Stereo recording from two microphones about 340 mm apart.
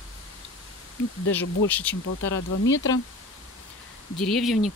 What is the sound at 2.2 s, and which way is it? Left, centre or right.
Speech, left.